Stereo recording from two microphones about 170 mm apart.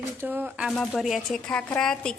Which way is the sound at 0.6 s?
5° left (ahead or behind).